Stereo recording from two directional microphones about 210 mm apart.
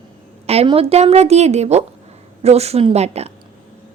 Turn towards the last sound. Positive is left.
turn(degrees=-30)  # may be behind; listen again after turning